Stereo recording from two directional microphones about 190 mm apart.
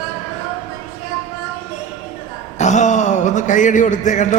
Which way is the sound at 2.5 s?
40° left (ahead or behind).